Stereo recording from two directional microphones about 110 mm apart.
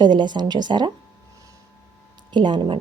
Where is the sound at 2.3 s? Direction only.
45° right (ahead or behind).